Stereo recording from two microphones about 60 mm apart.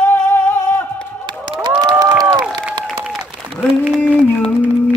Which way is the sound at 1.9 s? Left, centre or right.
Right.